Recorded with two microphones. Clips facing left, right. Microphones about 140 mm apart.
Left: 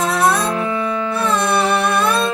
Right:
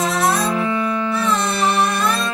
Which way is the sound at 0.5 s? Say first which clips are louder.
Even; centre (ahead or behind).